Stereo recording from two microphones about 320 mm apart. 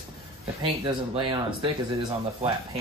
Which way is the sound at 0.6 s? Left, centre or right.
Centre.